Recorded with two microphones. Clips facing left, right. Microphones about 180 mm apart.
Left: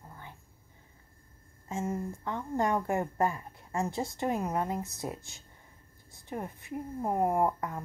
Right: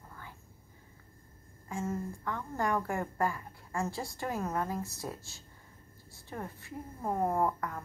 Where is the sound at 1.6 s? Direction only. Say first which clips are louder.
Left 2 dB; 20° left (ahead or behind).